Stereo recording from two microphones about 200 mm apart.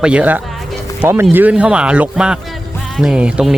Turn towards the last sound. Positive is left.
turn(degrees=-5)  # may be behind; listen again after turning